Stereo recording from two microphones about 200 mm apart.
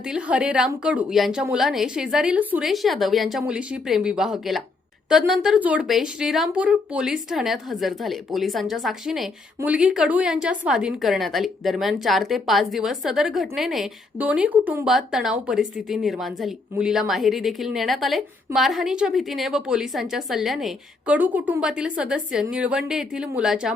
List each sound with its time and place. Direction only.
0.0 s a woman's voice: 5° right (ahead or behind)